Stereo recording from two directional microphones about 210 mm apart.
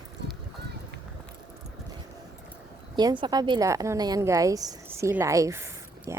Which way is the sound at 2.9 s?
20° right (ahead or behind).